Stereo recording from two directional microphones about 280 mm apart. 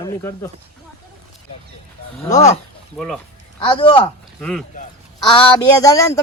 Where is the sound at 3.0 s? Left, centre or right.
Centre.